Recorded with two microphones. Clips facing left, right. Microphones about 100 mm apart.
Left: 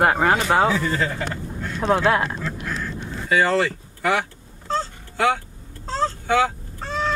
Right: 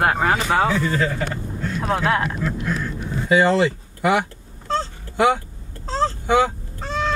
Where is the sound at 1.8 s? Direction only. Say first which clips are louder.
Left 3 dB; 5° right (ahead or behind).